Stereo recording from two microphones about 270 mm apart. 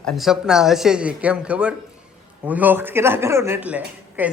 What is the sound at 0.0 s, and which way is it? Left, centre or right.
Speech, centre.